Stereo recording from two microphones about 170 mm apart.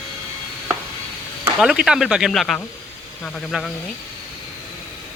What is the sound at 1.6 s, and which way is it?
Speech, 5° right (ahead or behind).